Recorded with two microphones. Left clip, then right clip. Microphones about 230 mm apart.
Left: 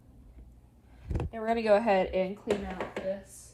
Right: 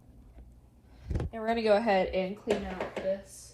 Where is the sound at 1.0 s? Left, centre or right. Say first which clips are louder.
Left 1 dB; left.